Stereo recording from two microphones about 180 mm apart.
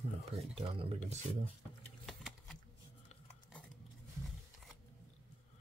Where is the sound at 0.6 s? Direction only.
30° right (ahead or behind).